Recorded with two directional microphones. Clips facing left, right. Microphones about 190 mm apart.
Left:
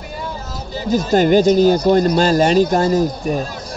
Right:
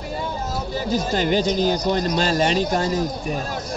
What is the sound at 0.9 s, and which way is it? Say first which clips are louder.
Speech: left 8 dB; 45° left (ahead or behind).